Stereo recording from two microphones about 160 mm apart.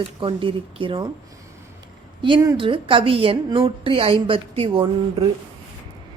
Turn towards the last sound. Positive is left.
turn(degrees=-35)  # may be behind; listen again after turning